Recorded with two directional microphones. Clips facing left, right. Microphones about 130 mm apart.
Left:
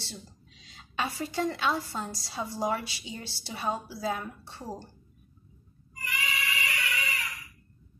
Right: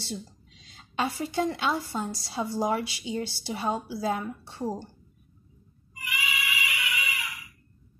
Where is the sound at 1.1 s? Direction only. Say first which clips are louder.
Right 2 dB; 20° right (ahead or behind).